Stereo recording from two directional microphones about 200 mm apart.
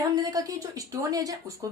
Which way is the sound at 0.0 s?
15° right (ahead or behind).